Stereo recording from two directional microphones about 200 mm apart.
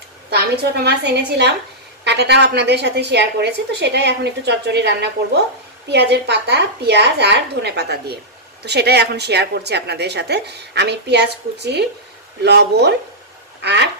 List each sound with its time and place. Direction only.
0.8 s a woman's voice: 55° right (ahead or behind)